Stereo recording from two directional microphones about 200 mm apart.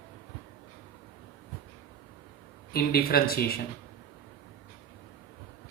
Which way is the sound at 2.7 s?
50° left (ahead or behind).